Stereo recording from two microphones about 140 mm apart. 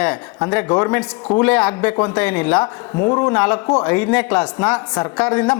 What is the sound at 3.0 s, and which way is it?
Speech, 25° left (ahead or behind).